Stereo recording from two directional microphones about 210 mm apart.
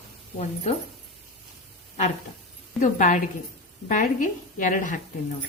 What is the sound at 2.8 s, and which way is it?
A woman's voice, 35° left (ahead or behind).